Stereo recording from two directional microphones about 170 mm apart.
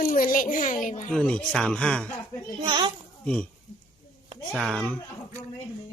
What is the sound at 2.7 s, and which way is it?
Speech, 25° right (ahead or behind).